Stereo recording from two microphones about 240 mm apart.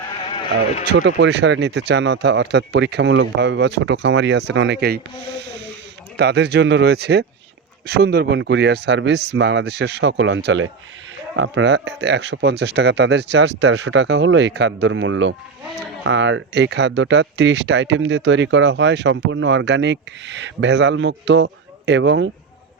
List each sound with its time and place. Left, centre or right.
0.2 s vehicle: left
0.9 s speech: right
5.4 s snake: right
6.1 s speech: right